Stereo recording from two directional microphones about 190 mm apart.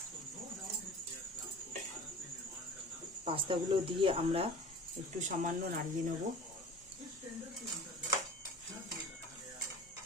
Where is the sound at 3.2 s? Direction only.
25° right (ahead or behind).